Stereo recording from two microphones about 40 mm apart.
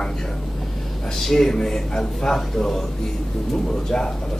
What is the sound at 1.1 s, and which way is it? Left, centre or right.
Speech, centre.